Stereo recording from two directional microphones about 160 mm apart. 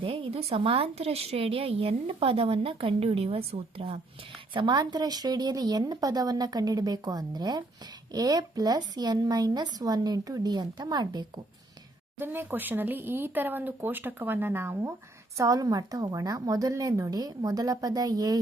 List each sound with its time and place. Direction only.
0.0 s a woman's voice: 35° right (ahead or behind)
12.2 s a woman's voice: 15° right (ahead or behind)